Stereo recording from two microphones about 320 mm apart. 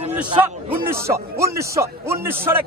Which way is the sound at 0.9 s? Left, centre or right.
Centre.